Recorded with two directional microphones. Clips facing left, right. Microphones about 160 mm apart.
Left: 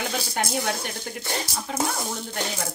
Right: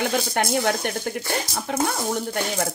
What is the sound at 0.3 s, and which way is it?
Speech, 60° right (ahead or behind).